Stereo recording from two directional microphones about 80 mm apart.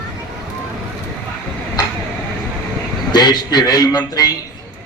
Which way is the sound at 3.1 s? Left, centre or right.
Left.